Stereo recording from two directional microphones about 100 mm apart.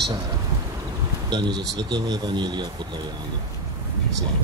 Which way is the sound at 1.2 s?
50° right (ahead or behind).